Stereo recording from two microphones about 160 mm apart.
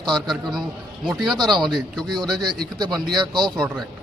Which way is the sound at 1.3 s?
25° right (ahead or behind).